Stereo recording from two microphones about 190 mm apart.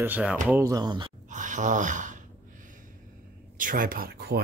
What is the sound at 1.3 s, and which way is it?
Gasp, 40° right (ahead or behind).